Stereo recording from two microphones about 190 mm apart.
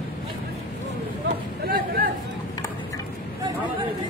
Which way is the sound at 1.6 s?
50° right (ahead or behind).